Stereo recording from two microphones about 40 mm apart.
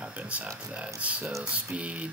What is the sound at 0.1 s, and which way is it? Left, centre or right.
Speech, right.